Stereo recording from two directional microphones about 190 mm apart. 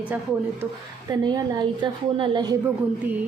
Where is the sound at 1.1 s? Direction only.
20° right (ahead or behind).